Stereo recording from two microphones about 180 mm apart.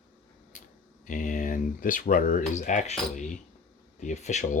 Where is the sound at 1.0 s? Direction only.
45° left (ahead or behind).